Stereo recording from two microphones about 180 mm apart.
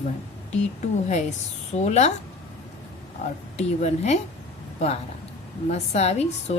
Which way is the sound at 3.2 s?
40° left (ahead or behind).